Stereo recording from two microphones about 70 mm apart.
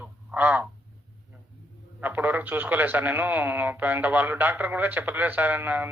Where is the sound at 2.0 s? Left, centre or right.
Right.